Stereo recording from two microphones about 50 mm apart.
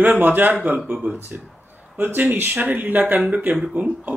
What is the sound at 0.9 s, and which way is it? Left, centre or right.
Speech, right.